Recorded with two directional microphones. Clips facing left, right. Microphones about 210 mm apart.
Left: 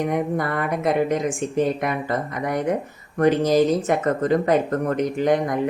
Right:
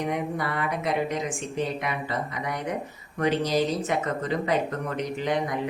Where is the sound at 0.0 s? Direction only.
50° left (ahead or behind).